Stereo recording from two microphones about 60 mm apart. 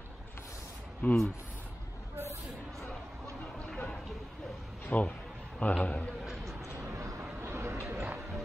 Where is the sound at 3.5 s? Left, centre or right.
Centre.